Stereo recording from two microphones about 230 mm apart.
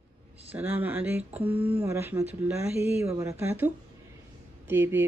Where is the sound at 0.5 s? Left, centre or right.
Centre.